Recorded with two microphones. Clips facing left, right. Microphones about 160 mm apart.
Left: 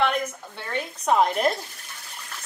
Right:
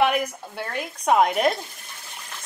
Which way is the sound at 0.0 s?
10° right (ahead or behind).